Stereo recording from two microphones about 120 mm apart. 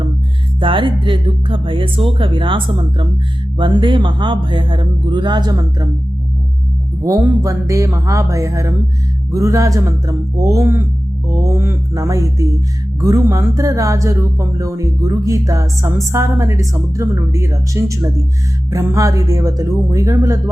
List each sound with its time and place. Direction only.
0.6 s speech: 45° right (ahead or behind)
7.0 s speech: 25° right (ahead or behind)